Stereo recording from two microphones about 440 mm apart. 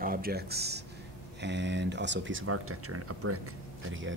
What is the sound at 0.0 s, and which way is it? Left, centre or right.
Speech, centre.